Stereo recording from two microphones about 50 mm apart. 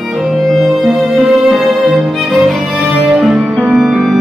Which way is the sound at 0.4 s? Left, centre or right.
Centre.